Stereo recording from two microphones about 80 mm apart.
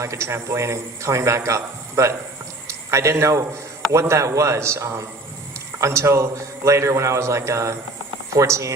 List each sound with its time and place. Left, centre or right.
0.0 s a man's voice: right